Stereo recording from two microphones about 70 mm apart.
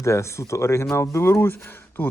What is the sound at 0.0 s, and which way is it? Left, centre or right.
Speech, left.